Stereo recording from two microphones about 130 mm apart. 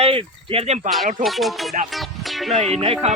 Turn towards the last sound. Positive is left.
turn(degrees=-50)  # may be behind; listen again after turning